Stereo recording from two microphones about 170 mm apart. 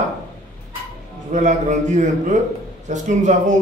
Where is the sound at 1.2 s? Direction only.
45° right (ahead or behind).